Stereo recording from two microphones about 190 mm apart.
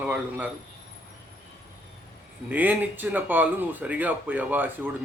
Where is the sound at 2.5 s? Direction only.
10° right (ahead or behind).